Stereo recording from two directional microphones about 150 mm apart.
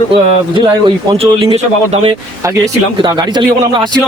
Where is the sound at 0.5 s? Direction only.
35° right (ahead or behind).